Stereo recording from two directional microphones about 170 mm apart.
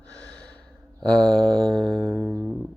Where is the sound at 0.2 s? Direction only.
5° left (ahead or behind).